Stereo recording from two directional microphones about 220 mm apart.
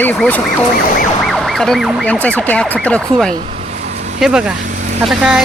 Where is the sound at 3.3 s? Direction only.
35° right (ahead or behind).